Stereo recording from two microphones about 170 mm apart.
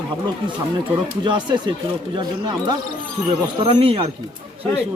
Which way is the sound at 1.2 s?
25° right (ahead or behind).